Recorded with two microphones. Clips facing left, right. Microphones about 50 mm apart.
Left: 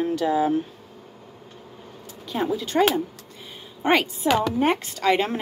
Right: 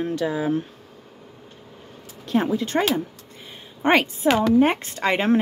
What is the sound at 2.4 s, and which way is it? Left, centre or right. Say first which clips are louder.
A woman's voice: left 3 dB; right.